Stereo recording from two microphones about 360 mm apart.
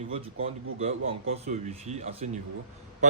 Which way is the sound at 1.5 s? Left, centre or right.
Centre.